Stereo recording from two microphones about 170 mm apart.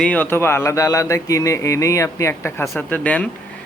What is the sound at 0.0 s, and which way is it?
Speech, 10° left (ahead or behind).